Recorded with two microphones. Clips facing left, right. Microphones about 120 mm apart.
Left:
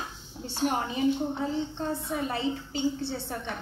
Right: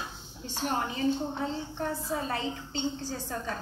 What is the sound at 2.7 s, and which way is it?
Speech, 25° right (ahead or behind).